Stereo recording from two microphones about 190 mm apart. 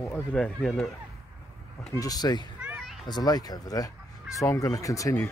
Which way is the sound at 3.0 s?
20° left (ahead or behind).